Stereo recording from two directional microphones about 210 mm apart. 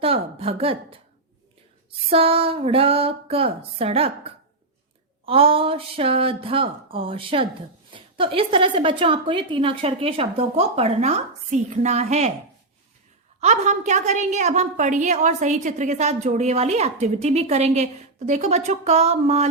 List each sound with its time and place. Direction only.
0.0 s a woman's voice: 25° right (ahead or behind)
2.0 s a woman's voice: 25° right (ahead or behind)
13.4 s a woman's voice: 35° right (ahead or behind)